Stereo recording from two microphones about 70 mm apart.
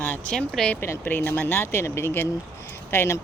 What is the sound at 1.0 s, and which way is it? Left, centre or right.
Speech, left.